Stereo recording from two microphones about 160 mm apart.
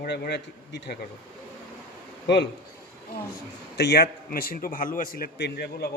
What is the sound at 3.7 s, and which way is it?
A man's voice, 90° left.